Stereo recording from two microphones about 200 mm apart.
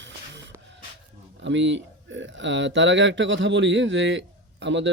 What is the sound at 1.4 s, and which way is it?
Speech, 65° right (ahead or behind).